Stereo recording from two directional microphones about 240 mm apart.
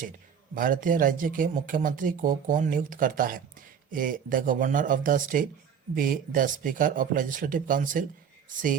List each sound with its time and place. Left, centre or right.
0.5 s speech: right